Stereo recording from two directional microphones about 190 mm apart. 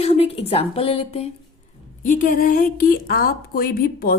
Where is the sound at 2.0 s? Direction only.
45° left (ahead or behind).